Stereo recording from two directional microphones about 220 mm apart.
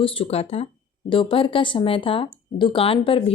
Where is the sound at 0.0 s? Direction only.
25° left (ahead or behind).